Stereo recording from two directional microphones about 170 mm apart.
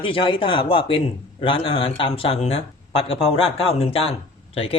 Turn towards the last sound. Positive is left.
turn(degrees=35)  # may be behind; listen again after turning